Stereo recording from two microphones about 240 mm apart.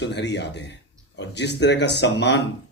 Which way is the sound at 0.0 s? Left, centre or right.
Left.